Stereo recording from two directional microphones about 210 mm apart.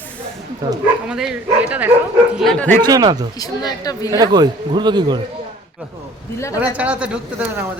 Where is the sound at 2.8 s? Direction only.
20° right (ahead or behind).